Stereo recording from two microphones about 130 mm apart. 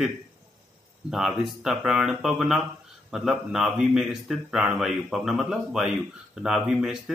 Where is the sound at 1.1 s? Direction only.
Centre (ahead or behind).